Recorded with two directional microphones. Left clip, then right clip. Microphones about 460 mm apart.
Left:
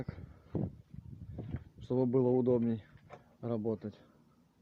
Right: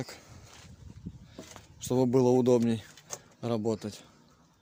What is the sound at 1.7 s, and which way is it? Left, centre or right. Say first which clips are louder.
Speech: right 5 dB; left.